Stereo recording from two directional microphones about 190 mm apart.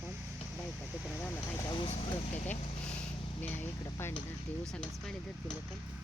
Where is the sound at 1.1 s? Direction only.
10° left (ahead or behind).